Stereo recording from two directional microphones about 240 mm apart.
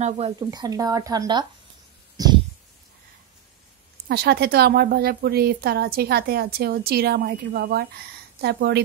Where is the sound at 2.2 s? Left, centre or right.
Centre.